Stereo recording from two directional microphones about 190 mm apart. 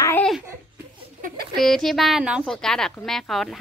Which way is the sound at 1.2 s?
50° right (ahead or behind).